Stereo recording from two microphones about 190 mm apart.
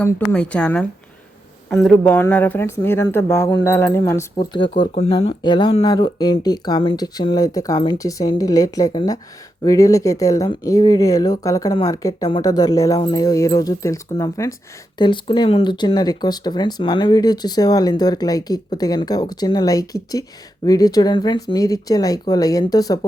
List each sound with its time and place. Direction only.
0.0 s speech: 10° left (ahead or behind)